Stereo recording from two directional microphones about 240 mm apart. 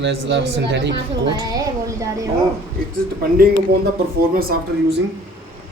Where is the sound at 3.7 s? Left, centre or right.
Right.